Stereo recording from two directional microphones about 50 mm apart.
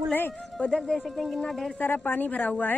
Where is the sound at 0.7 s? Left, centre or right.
Centre.